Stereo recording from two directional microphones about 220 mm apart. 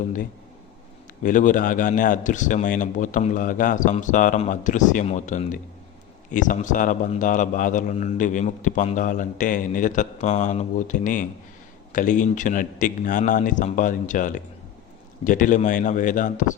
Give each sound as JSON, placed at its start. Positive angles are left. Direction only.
{"t": 1.2, "sound": "a man's voice", "side_deg": 35}